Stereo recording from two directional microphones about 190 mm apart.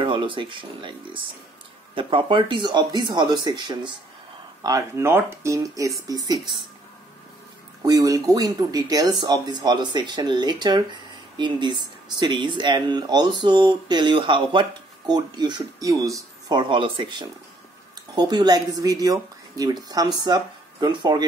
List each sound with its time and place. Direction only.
0.0 s speech: 25° right (ahead or behind)
2.0 s speech: 25° right (ahead or behind)
7.8 s speech: 20° right (ahead or behind)